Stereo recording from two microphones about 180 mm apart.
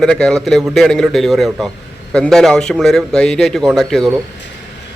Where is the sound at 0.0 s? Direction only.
5° left (ahead or behind).